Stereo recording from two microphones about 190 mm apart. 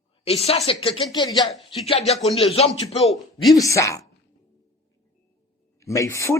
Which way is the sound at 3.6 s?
15° left (ahead or behind).